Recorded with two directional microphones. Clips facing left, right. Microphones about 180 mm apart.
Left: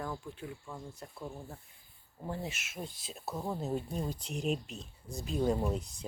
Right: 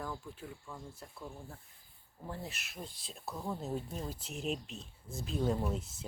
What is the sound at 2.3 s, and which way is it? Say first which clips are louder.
Speech: left 5 dB; centre (ahead or behind).